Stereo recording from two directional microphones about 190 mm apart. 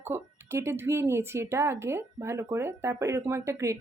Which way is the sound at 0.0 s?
15° right (ahead or behind).